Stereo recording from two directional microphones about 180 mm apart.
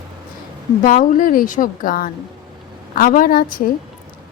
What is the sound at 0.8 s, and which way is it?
Speech, 50° left (ahead or behind).